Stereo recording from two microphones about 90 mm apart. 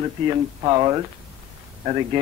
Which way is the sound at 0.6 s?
55° right (ahead or behind).